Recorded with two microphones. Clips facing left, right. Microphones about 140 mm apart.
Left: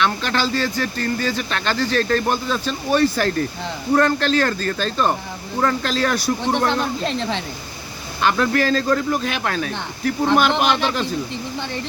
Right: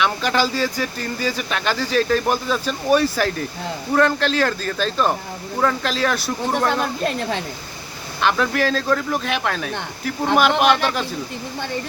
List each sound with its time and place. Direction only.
0.0 s speech: 10° right (ahead or behind)
8.2 s speech: centre (ahead or behind)